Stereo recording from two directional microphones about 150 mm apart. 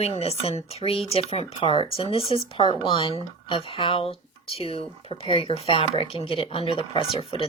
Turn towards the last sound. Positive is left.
turn(degrees=40)  # may be behind; listen again after turning